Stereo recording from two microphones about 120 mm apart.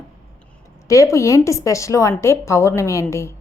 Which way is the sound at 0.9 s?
25° left (ahead or behind).